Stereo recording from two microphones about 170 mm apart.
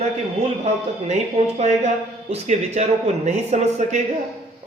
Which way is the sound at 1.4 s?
35° right (ahead or behind).